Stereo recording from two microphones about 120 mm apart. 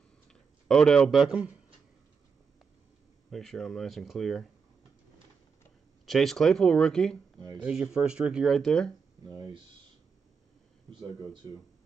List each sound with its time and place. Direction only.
0.3 s speech: 5° left (ahead or behind)
3.3 s speech: 5° left (ahead or behind)
6.0 s speech: centre (ahead or behind)
7.3 s speech: 40° right (ahead or behind)
7.6 s speech: 5° right (ahead or behind)
10.9 s speech: 40° right (ahead or behind)